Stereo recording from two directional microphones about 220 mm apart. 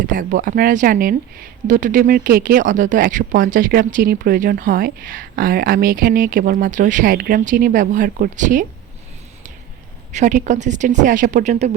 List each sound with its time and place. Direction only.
0.1 s speech: 40° right (ahead or behind)
10.1 s speech: 35° right (ahead or behind)